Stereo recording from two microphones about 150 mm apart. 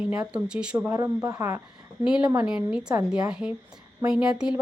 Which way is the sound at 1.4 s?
20° right (ahead or behind).